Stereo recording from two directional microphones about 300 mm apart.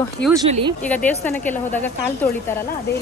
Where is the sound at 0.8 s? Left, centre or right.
Centre.